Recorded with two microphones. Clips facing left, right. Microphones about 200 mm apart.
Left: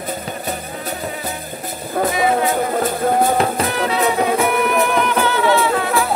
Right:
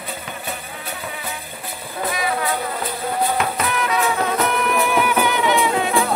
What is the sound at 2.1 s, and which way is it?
Music, 25° left (ahead or behind).